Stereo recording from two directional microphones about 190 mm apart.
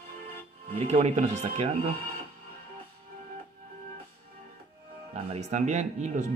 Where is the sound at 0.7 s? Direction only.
35° right (ahead or behind).